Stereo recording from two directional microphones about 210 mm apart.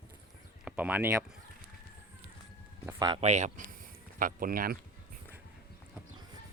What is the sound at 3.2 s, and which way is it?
Speech, 30° right (ahead or behind).